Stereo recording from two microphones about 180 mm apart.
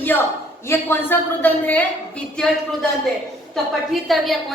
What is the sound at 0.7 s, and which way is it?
A woman's voice, 10° left (ahead or behind).